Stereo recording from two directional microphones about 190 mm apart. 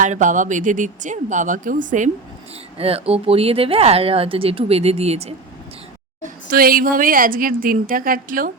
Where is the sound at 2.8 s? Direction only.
30° right (ahead or behind).